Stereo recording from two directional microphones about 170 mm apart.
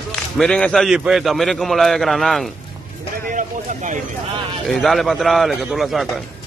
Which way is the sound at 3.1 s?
50° right (ahead or behind).